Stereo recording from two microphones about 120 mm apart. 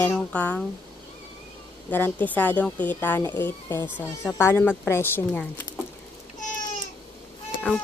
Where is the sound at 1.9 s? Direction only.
15° left (ahead or behind).